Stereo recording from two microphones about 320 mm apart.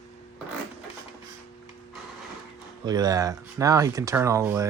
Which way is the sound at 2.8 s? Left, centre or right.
Centre.